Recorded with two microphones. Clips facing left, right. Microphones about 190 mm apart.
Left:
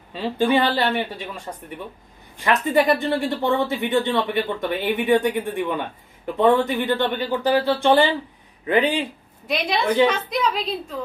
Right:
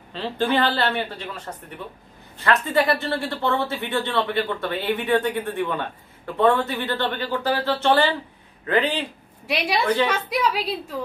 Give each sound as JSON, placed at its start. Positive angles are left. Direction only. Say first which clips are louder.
{"t": 0.1, "sound": "speech", "louder": "left 3 dB", "side_deg": 10}
{"t": 2.4, "sound": "speech", "louder": "left 2 dB", "side_deg": 15}
{"t": 9.5, "sound": "a woman's voice", "louder": "even", "side_deg": -10}